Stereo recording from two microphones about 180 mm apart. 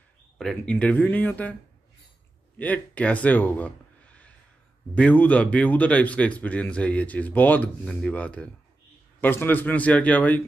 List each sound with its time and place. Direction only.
0.4 s speech: 5° left (ahead or behind)
2.6 s speech: 5° left (ahead or behind)